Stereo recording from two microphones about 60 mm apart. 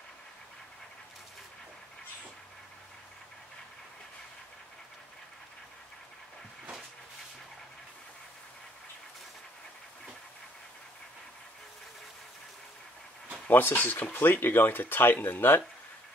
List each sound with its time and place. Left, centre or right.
13.5 s speech: left